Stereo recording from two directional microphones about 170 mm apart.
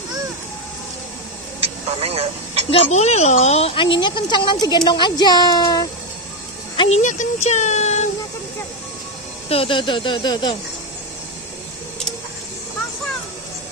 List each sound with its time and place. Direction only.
1.6 s a sound: 35° right (ahead or behind)
2.7 s speech: 40° left (ahead or behind); by 5.9 s 25° left (ahead or behind)
6.8 s speech: 45° left (ahead or behind)
9.5 s speech: 30° left (ahead or behind)